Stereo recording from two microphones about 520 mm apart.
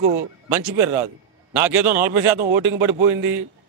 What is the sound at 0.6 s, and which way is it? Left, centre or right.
A man's voice, right.